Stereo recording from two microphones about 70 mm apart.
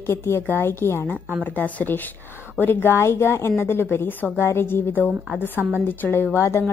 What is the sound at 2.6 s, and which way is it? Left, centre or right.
A woman's voice, left.